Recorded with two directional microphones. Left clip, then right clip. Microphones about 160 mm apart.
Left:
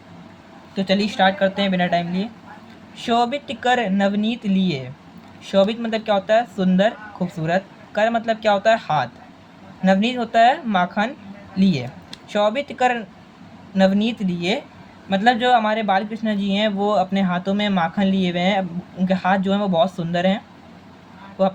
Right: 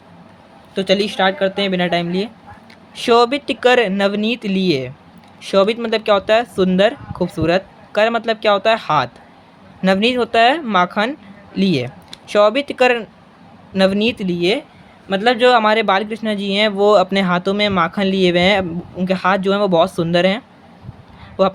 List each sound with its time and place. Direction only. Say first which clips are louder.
0.8 s speech: right 3 dB; 60° right (ahead or behind)
2.9 s speech: right 6 dB; 60° right (ahead or behind)